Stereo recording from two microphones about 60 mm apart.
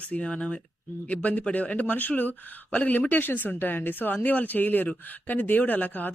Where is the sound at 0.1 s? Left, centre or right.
Left.